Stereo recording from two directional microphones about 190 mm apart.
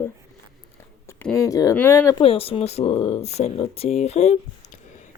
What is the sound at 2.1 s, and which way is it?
Speech, 30° left (ahead or behind).